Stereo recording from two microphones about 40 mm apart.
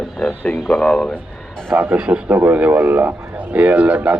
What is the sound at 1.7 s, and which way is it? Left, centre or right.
Speech, right.